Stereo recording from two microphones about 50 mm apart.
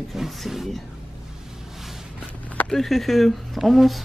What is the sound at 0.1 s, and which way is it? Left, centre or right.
Speech, centre.